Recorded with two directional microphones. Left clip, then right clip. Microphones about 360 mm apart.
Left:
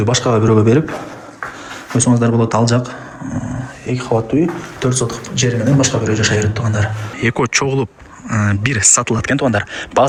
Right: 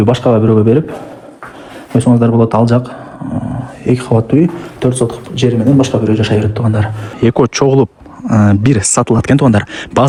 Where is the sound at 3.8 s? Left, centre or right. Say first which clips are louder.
Right 8 dB; centre.